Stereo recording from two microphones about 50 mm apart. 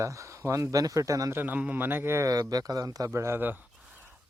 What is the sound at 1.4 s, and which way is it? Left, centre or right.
Speech, right.